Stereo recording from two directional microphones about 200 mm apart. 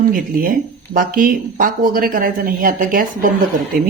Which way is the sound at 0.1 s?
45° right (ahead or behind).